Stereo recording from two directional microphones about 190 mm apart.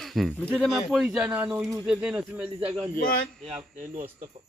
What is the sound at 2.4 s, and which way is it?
A man's voice, 25° right (ahead or behind).